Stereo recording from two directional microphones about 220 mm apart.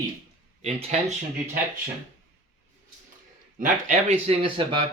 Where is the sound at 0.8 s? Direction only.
30° right (ahead or behind).